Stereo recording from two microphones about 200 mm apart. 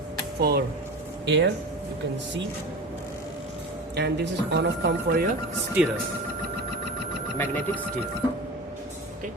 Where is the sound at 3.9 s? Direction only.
55° right (ahead or behind).